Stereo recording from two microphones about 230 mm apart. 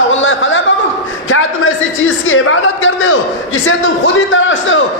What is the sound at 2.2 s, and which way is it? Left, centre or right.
A man's voice, left.